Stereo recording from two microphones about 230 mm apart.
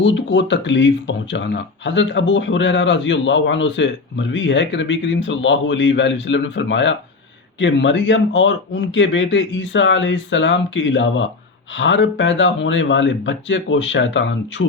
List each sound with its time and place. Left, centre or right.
0.0 s speech: left